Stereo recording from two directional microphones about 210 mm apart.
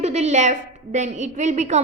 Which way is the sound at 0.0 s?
30° right (ahead or behind).